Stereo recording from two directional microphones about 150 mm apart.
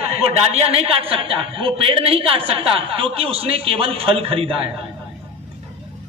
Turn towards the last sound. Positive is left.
turn(degrees=-40)  # may be behind; listen again after turning